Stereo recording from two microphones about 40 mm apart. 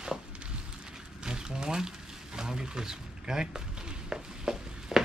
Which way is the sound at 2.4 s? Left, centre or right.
Centre.